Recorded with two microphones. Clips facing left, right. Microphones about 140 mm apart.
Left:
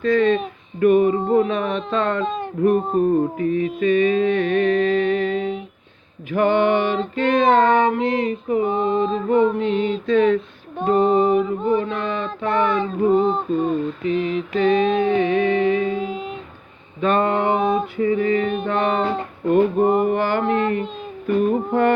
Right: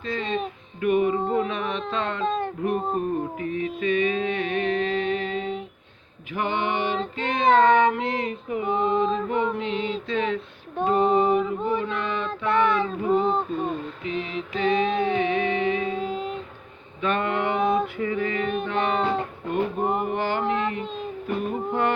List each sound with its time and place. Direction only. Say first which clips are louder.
0.0 s a sound: left 10 dB; 60° left (ahead or behind)
2.2 s speech: even; 5° left (ahead or behind)
3.0 s a sound: left 9 dB; 40° left (ahead or behind)
10.8 s child singing: left 4 dB; 40° left (ahead or behind)
13.5 s a sound: left 7 dB; 40° left (ahead or behind)
14.0 s mantra: left 8 dB; 45° left (ahead or behind)
16.0 s a sound: left 1 dB; 5° left (ahead or behind)
17.0 s mantra: left 6 dB; 35° left (ahead or behind)
17.9 s female singing: left 7 dB; 35° left (ahead or behind)
18.6 s music: left 4 dB; 45° left (ahead or behind)
20.0 s mantra: left 6 dB; 55° left (ahead or behind)
21.2 s music: left 9 dB; 50° left (ahead or behind)